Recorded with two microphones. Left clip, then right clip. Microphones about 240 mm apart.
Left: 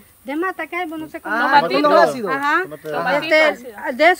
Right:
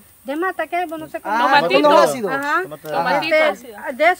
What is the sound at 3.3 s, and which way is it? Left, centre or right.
Speech, left.